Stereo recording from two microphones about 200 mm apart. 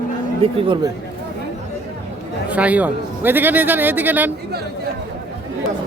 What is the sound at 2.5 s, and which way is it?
A man's voice, 5° right (ahead or behind).